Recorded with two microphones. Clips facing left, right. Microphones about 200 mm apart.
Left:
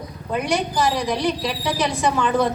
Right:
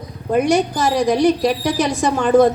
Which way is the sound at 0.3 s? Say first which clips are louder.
Right 6 dB; 45° right (ahead or behind).